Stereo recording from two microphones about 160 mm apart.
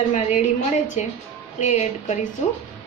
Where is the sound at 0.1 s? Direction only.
45° left (ahead or behind).